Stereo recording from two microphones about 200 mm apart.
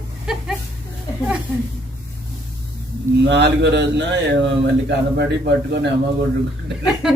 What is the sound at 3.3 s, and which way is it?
Speech, 60° right (ahead or behind).